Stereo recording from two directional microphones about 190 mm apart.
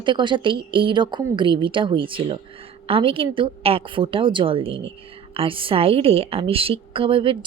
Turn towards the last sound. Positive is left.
turn(degrees=-25)  # may be behind; listen again after turning